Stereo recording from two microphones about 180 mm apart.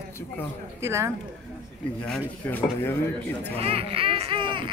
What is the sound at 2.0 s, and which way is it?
Speech, 5° left (ahead or behind).